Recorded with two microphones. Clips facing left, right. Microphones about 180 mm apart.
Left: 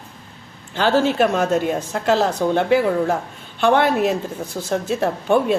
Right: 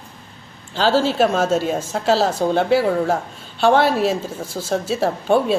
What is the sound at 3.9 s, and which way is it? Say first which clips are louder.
Speech: even; 15° left (ahead or behind).